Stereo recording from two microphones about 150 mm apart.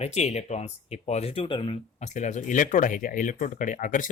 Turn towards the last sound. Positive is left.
turn(degrees=60)  # may be behind; listen again after turning